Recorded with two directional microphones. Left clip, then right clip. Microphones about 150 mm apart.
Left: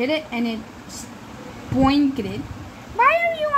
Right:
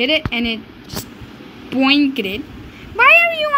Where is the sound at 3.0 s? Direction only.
20° right (ahead or behind).